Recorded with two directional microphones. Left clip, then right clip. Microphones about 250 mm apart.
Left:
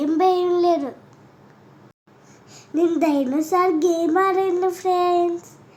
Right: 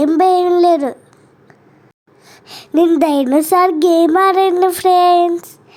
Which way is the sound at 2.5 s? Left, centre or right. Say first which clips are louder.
Right 8 dB; right.